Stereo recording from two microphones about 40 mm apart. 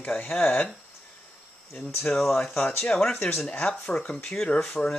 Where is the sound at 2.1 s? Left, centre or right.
Centre.